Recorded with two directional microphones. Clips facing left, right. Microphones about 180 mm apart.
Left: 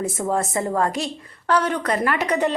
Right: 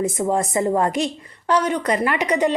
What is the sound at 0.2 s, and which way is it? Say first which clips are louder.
A woman's voice: right 1 dB; 15° right (ahead or behind).